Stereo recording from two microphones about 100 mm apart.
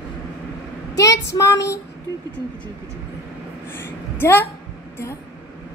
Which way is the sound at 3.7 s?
25° left (ahead or behind).